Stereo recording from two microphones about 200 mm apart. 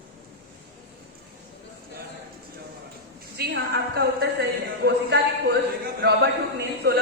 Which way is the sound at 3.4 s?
55° right (ahead or behind).